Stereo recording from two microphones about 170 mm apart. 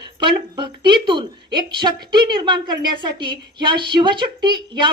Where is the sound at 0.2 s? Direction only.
25° right (ahead or behind).